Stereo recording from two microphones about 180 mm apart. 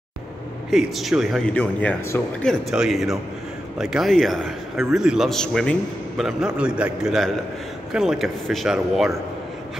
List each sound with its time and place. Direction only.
0.7 s a man's voice: centre (ahead or behind)
2.7 s a man's voice: 5° right (ahead or behind)